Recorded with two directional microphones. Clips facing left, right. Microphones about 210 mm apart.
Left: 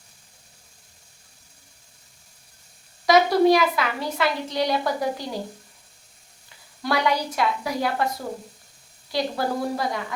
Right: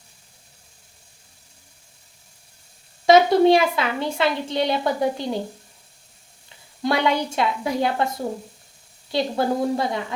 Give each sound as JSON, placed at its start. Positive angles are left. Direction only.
{"t": 3.1, "sound": "a woman's voice", "side_deg": -25}
{"t": 6.8, "sound": "a woman's voice", "side_deg": -25}
{"t": 9.1, "sound": "a woman's voice", "side_deg": -25}